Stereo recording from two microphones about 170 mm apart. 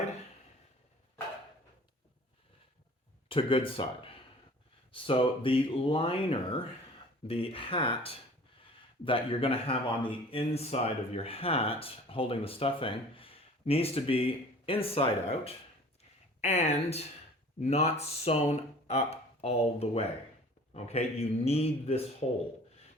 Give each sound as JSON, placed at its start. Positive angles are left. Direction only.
{"t": 3.2, "sound": "speech", "side_deg": 30}